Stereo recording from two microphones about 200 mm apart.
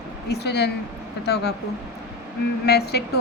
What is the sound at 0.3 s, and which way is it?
A woman's voice, 55° left (ahead or behind).